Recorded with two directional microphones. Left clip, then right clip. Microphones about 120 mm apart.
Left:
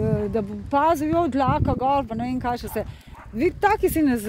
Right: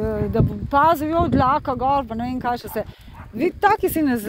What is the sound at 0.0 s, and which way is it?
Speech, 25° left (ahead or behind).